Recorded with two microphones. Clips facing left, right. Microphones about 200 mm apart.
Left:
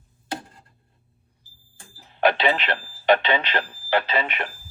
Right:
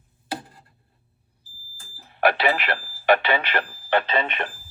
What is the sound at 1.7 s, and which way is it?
Smoke detector, centre (ahead or behind).